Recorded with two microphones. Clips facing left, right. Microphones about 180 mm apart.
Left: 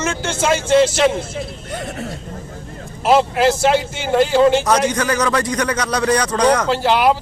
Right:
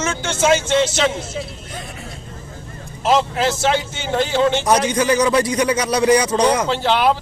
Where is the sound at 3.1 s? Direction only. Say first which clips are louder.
Left 3 dB; 5° left (ahead or behind).